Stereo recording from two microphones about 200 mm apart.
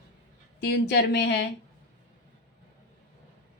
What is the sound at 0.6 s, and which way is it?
Speech, 55° left (ahead or behind).